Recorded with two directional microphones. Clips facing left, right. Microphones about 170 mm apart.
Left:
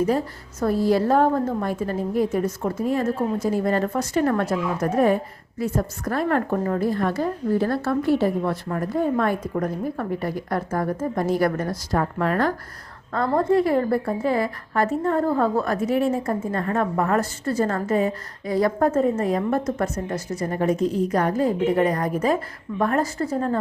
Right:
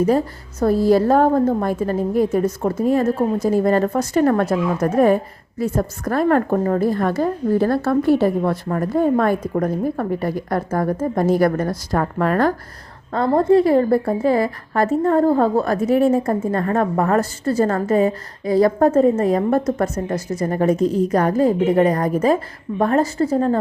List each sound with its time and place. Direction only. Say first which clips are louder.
0.6 s a woman's voice: right 5 dB; 40° right (ahead or behind)
13.1 s a woman's voice: right 5 dB; 25° right (ahead or behind)